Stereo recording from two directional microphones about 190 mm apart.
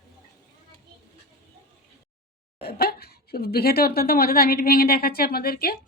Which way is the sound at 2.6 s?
55° left (ahead or behind).